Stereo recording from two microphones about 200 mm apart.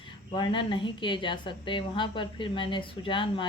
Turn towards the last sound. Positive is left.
turn(degrees=25)  # may be behind; listen again after turning